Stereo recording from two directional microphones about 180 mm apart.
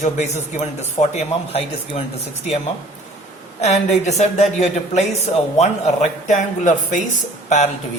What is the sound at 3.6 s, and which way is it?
A woman's voice, 40° left (ahead or behind).